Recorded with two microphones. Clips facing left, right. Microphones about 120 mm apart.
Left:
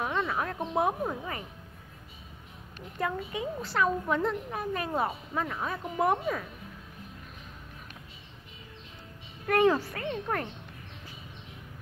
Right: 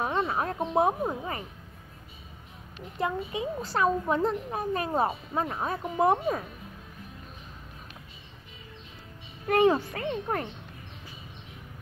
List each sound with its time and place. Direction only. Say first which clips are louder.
0.0 s a sound: right 2 dB; 30° right (ahead or behind)
0.7 s a child's voice: right 3 dB; 25° right (ahead or behind)
3.0 s a child's voice: right 2 dB; 20° right (ahead or behind)
3.6 s speech: right 2 dB; 35° right (ahead or behind)
9.5 s a child's voice: right 2 dB; 20° right (ahead or behind)